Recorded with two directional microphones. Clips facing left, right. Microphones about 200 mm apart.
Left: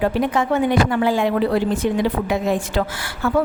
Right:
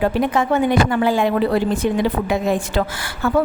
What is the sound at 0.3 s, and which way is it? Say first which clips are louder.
A woman's voice: right 1 dB; 45° right (ahead or behind).